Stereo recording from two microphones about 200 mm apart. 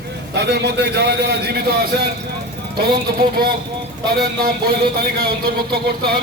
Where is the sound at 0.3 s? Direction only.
55° right (ahead or behind).